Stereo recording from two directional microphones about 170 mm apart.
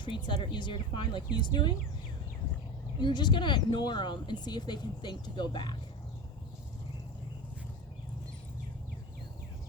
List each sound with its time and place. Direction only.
0.0 s speech: 30° left (ahead or behind)
3.0 s speech: 25° left (ahead or behind)